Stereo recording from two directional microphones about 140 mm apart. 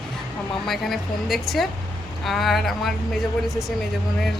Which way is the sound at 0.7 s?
Centre (ahead or behind).